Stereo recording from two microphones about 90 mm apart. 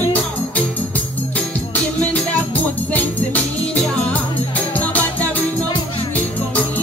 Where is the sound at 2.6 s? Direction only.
20° left (ahead or behind).